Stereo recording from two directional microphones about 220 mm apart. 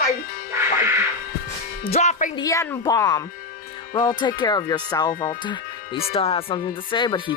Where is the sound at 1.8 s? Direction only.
30° left (ahead or behind).